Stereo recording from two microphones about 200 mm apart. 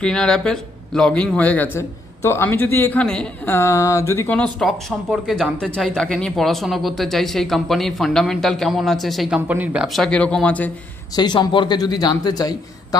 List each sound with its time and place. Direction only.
0.0 s speech: 5° left (ahead or behind)
4.6 s speech: centre (ahead or behind)
11.1 s a man's voice: 20° left (ahead or behind)